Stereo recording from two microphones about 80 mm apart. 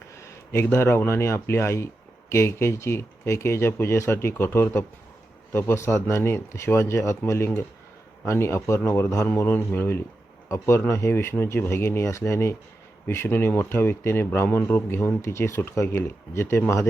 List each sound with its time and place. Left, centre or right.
0.2 s speech: left
9.5 s a man's voice: left